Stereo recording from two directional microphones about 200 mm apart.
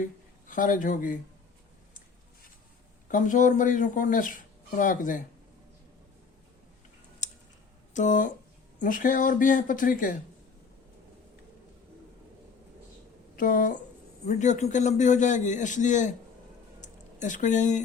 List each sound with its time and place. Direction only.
0.0 s speech: 40° left (ahead or behind)
3.1 s speech: 40° left (ahead or behind)
7.2 s tick-tock: 40° left (ahead or behind)
7.9 s speech: 40° left (ahead or behind)
13.3 s speech: 45° left (ahead or behind)